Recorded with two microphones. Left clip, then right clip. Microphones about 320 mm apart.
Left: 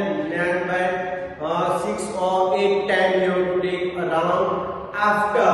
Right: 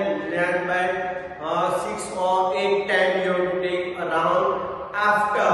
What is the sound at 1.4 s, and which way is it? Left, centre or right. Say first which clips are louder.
Mantra: left 1 dB; centre.